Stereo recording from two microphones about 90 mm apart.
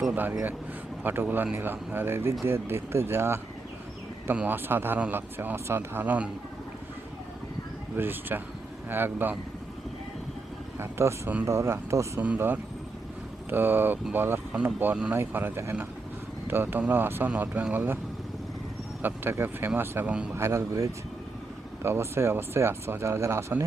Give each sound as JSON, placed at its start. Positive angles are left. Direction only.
{"t": 0.1, "sound": "speech", "side_deg": -20}
{"t": 7.9, "sound": "speech", "side_deg": -20}
{"t": 10.8, "sound": "speech", "side_deg": -30}
{"t": 12.2, "sound": "speech", "side_deg": -20}
{"t": 19.0, "sound": "speech", "side_deg": -25}